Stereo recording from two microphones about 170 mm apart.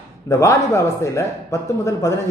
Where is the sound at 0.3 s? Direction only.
20° left (ahead or behind).